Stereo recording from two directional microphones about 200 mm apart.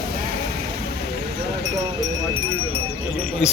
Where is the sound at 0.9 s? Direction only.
55° right (ahead or behind).